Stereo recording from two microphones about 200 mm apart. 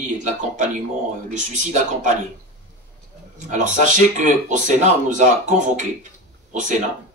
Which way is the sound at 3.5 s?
40° right (ahead or behind).